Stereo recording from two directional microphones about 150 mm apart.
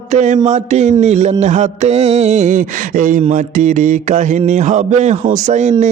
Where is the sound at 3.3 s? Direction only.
60° right (ahead or behind).